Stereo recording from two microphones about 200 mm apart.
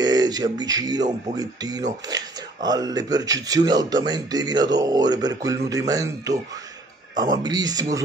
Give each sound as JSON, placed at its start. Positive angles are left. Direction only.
{"t": 0.0, "sound": "speech", "side_deg": -20}